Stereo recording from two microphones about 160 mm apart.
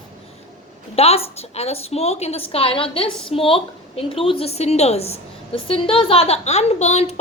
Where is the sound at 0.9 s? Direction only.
40° left (ahead or behind).